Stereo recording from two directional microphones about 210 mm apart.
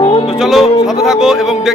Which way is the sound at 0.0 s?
25° left (ahead or behind).